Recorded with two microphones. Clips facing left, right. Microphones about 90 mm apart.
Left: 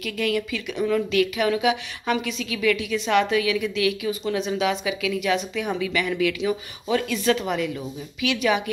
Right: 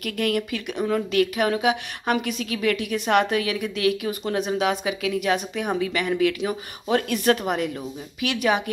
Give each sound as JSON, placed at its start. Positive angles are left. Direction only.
{"t": 0.0, "sound": "a woman's voice", "side_deg": -50}